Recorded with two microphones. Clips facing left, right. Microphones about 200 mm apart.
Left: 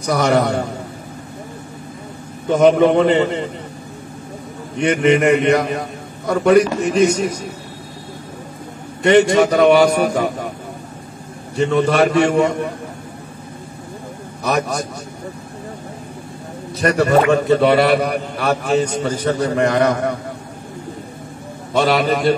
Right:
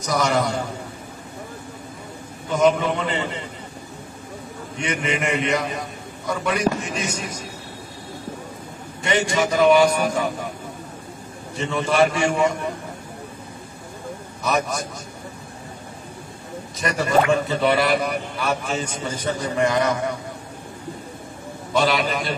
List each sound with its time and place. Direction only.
0.3 s a man's voice: 65° left (ahead or behind)
2.5 s a man's voice: 60° left (ahead or behind); by 3.4 s 40° left (ahead or behind)
4.8 s a man's voice: 60° left (ahead or behind)
9.0 s a man's voice: 60° left (ahead or behind)
11.7 s a man's voice: 60° left (ahead or behind)
14.4 s a man's voice: 65° left (ahead or behind)
16.8 s a man's voice: 65° left (ahead or behind)
21.7 s a man's voice: 60° left (ahead or behind)